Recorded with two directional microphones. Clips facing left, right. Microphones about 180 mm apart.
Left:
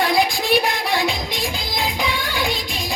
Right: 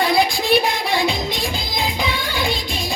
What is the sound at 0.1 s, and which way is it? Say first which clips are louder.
Music: right 1 dB; 15° left (ahead or behind).